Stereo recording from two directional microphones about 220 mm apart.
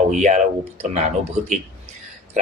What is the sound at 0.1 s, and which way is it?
Speech, 35° right (ahead or behind).